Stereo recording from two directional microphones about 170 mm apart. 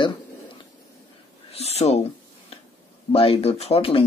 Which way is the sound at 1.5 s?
40° left (ahead or behind).